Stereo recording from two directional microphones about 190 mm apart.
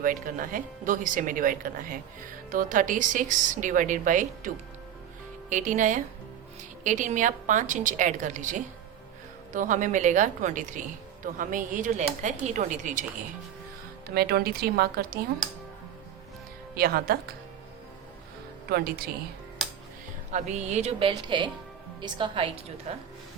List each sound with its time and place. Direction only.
0.0 s a woman's voice: 45° right (ahead or behind)
14.1 s speech: 55° right (ahead or behind)
16.7 s speech: 50° right (ahead or behind)
18.7 s speech: 55° right (ahead or behind)
20.3 s a woman's voice: 35° right (ahead or behind)